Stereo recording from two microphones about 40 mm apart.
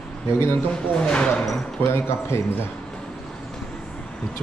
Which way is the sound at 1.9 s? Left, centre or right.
Left.